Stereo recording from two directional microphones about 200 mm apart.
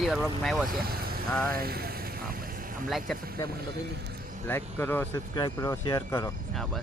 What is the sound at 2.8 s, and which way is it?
Speech, centre (ahead or behind).